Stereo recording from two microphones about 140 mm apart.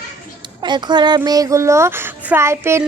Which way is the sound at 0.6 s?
30° right (ahead or behind).